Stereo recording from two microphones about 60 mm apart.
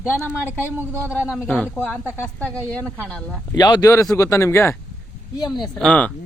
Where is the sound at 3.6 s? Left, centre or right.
Left.